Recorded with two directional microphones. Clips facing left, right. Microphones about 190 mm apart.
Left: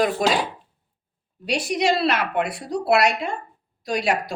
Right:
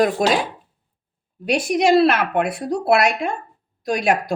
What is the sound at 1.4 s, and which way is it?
A woman's voice, 55° right (ahead or behind).